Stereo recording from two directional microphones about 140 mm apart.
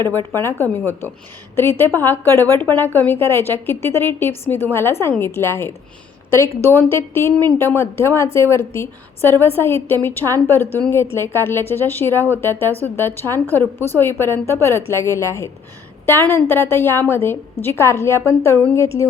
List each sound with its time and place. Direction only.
0.1 s a woman's voice: 15° left (ahead or behind)